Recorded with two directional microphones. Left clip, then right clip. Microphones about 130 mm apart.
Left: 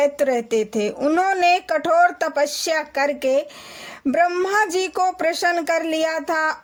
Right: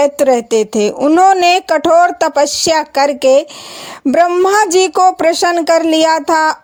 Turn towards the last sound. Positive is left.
turn(degrees=-50)  # may be behind; listen again after turning